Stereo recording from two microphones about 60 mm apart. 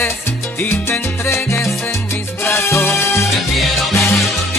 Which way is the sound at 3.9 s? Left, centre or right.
Left.